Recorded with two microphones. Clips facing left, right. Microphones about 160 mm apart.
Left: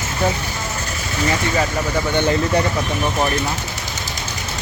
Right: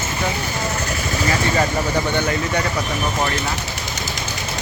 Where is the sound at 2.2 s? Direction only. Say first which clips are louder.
Left 4 dB; 30° left (ahead or behind).